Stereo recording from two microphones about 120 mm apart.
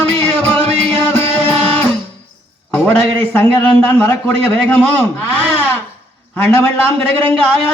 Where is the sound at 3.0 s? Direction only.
20° left (ahead or behind).